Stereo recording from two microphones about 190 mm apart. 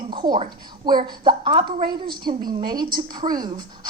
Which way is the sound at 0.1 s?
25° right (ahead or behind).